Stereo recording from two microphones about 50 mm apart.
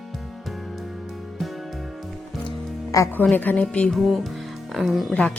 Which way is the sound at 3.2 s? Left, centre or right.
Left.